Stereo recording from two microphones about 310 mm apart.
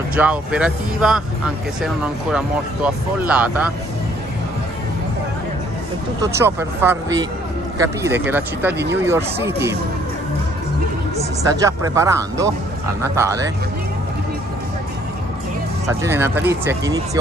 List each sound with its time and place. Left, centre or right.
0.1 s speech: centre
6.2 s speech: centre
11.4 s speech: centre
15.9 s speech: centre